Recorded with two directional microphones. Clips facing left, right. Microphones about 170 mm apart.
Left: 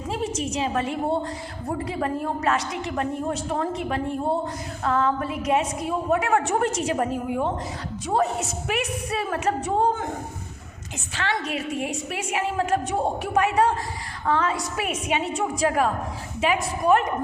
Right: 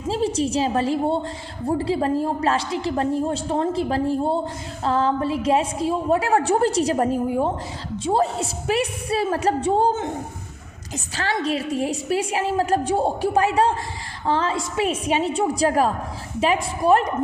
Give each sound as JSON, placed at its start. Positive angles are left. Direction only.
{"t": 0.1, "sound": "a woman's voice", "side_deg": -30}
{"t": 11.2, "sound": "a woman's voice", "side_deg": -35}